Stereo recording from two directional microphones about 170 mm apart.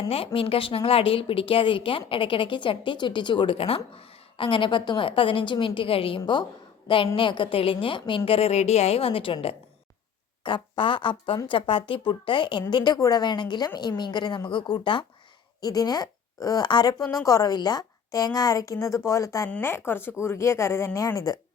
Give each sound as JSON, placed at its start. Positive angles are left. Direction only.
{"t": 0.3, "sound": "a woman's voice", "side_deg": 35}